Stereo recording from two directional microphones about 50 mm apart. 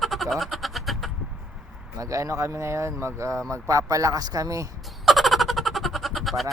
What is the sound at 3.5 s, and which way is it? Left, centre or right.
Speech, right.